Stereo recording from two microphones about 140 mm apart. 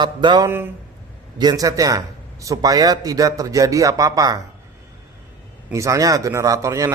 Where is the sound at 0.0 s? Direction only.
35° right (ahead or behind).